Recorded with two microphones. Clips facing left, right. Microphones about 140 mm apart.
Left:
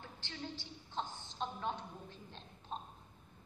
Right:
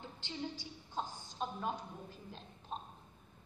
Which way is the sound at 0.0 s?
15° right (ahead or behind).